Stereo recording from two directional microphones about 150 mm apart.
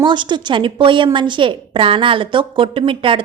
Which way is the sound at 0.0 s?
30° right (ahead or behind).